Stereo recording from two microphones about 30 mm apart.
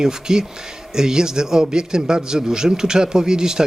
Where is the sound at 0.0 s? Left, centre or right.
Right.